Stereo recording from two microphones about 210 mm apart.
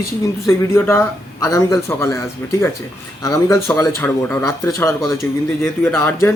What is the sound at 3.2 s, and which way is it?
Speech, 15° left (ahead or behind).